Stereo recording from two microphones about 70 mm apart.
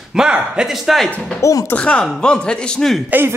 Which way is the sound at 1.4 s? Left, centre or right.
Left.